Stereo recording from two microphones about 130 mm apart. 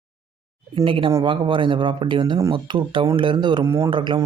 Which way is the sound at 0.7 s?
45° right (ahead or behind).